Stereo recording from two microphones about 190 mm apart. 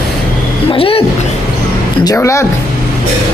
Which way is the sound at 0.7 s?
30° left (ahead or behind).